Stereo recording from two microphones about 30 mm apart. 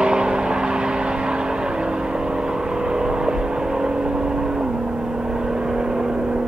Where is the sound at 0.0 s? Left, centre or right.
Right.